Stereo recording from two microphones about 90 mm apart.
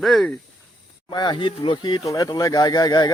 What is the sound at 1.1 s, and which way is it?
Speech, 55° left (ahead or behind).